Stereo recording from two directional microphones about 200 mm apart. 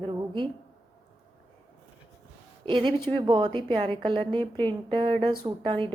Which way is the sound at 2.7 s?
25° right (ahead or behind).